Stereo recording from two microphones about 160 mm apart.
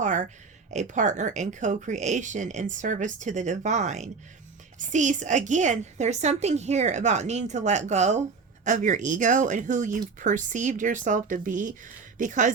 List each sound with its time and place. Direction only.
0.0 s a woman's voice: 50° right (ahead or behind)